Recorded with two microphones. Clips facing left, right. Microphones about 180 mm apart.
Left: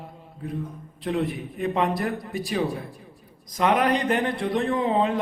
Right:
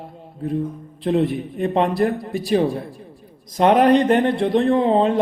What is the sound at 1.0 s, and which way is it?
A man's voice, 30° right (ahead or behind).